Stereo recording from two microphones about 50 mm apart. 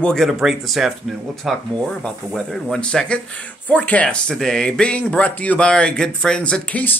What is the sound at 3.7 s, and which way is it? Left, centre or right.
Speech, left.